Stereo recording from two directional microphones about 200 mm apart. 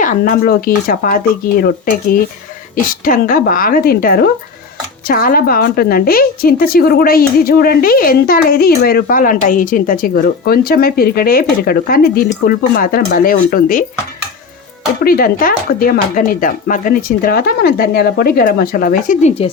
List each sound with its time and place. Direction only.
0.0 s a woman's voice: 45° left (ahead or behind)
15.0 s a woman's voice: 45° left (ahead or behind)